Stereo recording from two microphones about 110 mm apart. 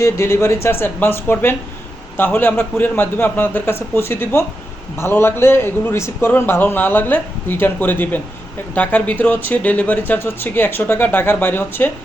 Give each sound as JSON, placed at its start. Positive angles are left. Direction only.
{"t": 0.0, "sound": "a man's voice", "side_deg": 25}